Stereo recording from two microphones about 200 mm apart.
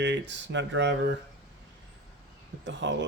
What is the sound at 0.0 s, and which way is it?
Speech, 65° right (ahead or behind).